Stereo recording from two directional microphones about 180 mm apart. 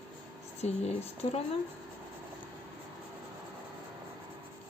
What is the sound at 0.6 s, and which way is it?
Speech, 35° left (ahead or behind).